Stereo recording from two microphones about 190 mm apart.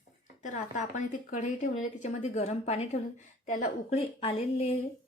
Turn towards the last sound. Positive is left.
turn(degrees=30)  # may be behind; listen again after turning